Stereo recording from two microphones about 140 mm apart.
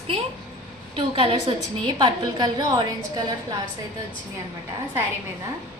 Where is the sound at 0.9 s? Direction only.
40° right (ahead or behind).